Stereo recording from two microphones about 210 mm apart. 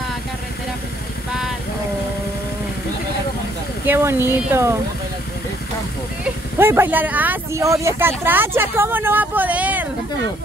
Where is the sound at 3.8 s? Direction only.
10° right (ahead or behind).